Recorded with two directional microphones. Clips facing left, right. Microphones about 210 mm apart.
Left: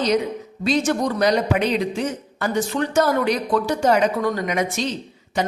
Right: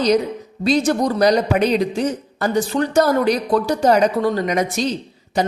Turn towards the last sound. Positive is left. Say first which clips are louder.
# right 3 dB
turn(degrees=-35)  # may be behind; listen again after turning